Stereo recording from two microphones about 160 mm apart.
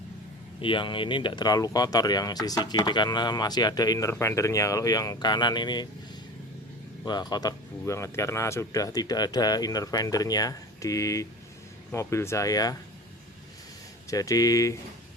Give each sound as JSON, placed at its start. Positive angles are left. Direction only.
{"t": 0.6, "sound": "speech", "side_deg": 30}
{"t": 7.0, "sound": "speech", "side_deg": 25}
{"t": 14.1, "sound": "speech", "side_deg": 20}